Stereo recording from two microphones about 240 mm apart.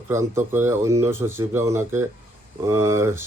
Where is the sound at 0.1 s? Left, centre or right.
Centre.